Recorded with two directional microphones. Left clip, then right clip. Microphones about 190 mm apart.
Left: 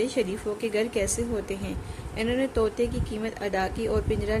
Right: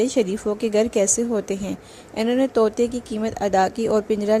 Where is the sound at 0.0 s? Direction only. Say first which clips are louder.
Right 6 dB; 45° right (ahead or behind).